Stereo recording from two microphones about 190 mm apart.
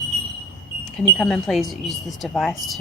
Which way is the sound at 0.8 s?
Centre (ahead or behind).